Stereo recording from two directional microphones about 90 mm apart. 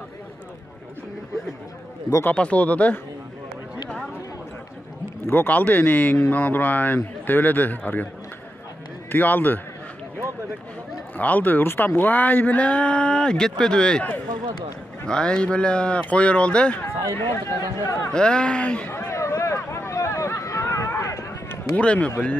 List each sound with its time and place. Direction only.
2.3 s speech: 15° left (ahead or behind)
5.2 s speech: 25° left (ahead or behind)
9.1 s speech: 20° left (ahead or behind)
11.1 s speech: 20° left (ahead or behind)
17.1 s speech: 25° left (ahead or behind)
18.1 s speech: 10° left (ahead or behind)
18.9 s a sound: 25° left (ahead or behind)
21.7 s speech: 15° left (ahead or behind)